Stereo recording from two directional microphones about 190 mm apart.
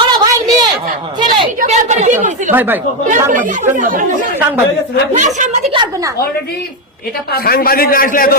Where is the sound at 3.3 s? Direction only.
40° right (ahead or behind).